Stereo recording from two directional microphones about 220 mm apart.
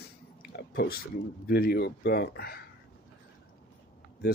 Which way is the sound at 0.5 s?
45° left (ahead or behind).